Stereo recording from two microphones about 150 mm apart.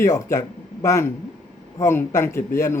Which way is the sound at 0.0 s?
20° left (ahead or behind).